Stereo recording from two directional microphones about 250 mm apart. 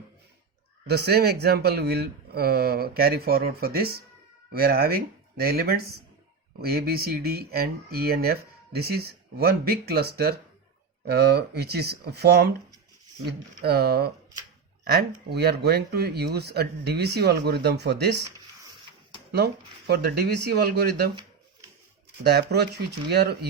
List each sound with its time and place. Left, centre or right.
0.9 s speech: right
15.3 s speech: right
19.9 s speech: right
22.2 s speech: right